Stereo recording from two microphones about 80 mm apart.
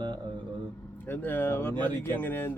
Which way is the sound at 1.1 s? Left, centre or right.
Left.